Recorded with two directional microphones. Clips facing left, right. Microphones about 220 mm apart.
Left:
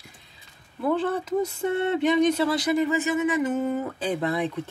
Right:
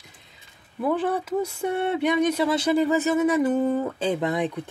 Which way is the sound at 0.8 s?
10° right (ahead or behind).